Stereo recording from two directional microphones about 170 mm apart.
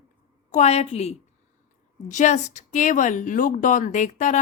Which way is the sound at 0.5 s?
40° left (ahead or behind).